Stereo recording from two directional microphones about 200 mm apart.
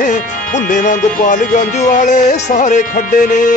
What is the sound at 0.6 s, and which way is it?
Music, 40° left (ahead or behind).